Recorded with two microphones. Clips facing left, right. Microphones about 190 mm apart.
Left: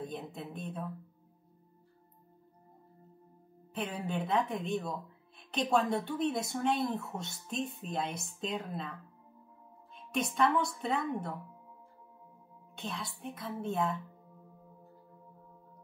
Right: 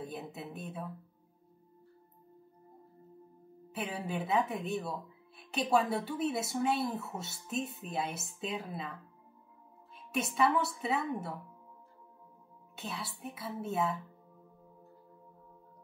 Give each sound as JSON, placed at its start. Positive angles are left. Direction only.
{"t": 0.0, "sound": "speech", "side_deg": -5}
{"t": 3.7, "sound": "speech", "side_deg": -5}
{"t": 9.9, "sound": "speech", "side_deg": -5}
{"t": 12.7, "sound": "speech", "side_deg": -5}